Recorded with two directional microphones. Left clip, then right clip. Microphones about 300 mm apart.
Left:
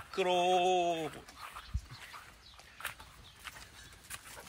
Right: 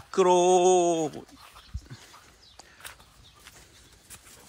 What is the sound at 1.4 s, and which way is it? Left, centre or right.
Dog, centre.